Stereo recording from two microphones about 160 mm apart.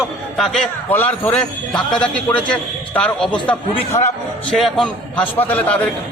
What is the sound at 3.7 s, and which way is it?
Speech, 45° left (ahead or behind).